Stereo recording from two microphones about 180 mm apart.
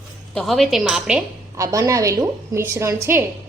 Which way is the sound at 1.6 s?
20° right (ahead or behind).